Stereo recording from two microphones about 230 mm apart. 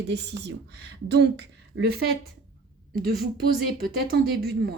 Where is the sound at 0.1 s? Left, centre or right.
Right.